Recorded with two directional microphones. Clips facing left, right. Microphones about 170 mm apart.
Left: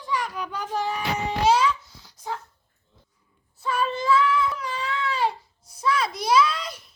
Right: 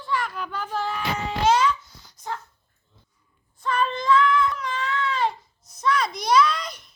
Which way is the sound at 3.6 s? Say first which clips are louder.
Right 1 dB; 5° left (ahead or behind).